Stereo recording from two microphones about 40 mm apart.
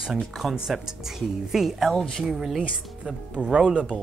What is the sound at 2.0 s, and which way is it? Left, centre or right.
Speech, centre.